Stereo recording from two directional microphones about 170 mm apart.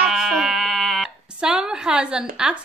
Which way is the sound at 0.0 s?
5° right (ahead or behind).